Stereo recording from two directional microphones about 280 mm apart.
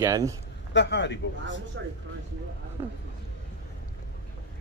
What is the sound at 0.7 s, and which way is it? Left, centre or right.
Speech, left.